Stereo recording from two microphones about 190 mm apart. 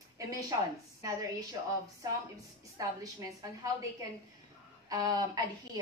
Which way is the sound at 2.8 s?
15° right (ahead or behind).